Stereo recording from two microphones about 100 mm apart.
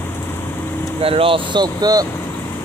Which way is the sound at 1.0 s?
65° right (ahead or behind).